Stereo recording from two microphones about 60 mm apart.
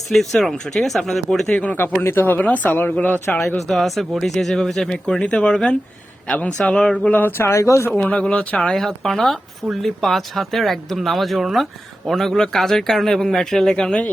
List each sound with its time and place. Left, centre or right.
0.1 s speech: centre
2.0 s speech: left
3.3 s speech: centre
3.6 s speech: centre
6.2 s speech: left
7.1 s speech: left
7.5 s speech: left
8.0 s speech: centre
8.7 s speech: centre